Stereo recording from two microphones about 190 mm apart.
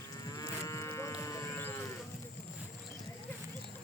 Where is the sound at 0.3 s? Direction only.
20° left (ahead or behind).